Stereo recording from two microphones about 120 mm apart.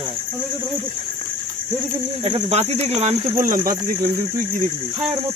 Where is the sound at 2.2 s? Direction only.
60° right (ahead or behind); by 3.6 s 80° right.